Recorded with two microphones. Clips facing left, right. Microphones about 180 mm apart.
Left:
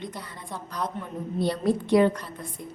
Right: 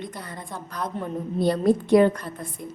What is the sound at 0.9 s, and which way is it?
Speech, 35° right (ahead or behind).